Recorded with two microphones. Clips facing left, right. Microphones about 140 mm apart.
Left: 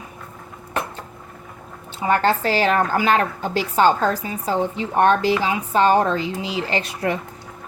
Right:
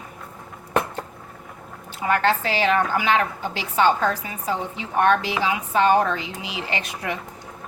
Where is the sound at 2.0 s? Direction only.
30° left (ahead or behind).